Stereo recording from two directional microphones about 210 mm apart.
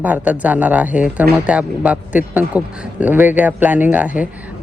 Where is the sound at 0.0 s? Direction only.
5° right (ahead or behind).